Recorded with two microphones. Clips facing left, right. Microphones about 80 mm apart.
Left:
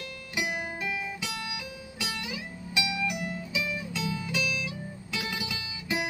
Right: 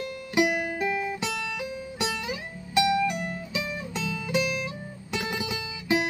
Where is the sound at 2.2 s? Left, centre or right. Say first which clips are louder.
Right 3 dB; right.